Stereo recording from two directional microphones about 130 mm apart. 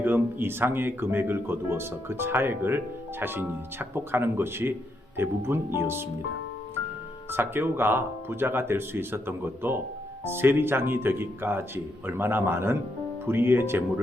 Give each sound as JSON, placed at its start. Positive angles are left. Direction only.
{"t": 0.0, "sound": "speech", "side_deg": -15}
{"t": 7.3, "sound": "speech", "side_deg": -15}